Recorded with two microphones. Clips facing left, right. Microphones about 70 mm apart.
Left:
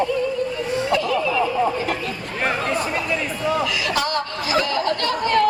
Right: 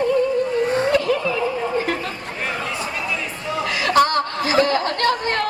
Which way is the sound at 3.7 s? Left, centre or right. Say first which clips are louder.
Right 6 dB; right.